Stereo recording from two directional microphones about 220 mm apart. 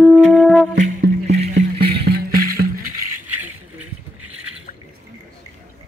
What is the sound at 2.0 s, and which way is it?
Music, 45° right (ahead or behind).